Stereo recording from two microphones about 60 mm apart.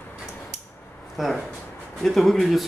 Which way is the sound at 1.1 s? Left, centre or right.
Centre.